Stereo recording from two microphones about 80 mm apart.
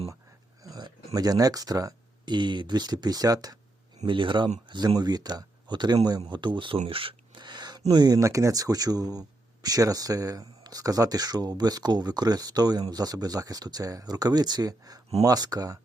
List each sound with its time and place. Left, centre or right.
0.6 s speech: right
2.2 s speech: right
4.0 s speech: right